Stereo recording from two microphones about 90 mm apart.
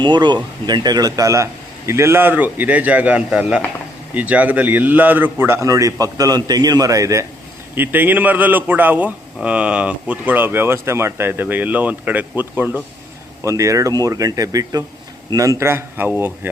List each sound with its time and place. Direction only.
0.0 s a man's voice: 55° right (ahead or behind); by 7.3 s 35° right (ahead or behind)
7.8 s speech: 20° right (ahead or behind)
13.4 s a man's voice: 35° right (ahead or behind)